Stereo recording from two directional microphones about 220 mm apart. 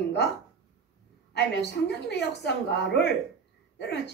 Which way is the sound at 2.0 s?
50° left (ahead or behind).